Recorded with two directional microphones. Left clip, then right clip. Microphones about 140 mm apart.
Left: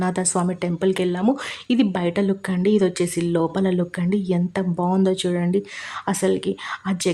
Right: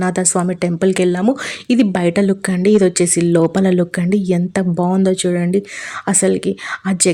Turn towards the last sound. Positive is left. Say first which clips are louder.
# right 7 dB
turn(degrees=-25)  # may be behind; listen again after turning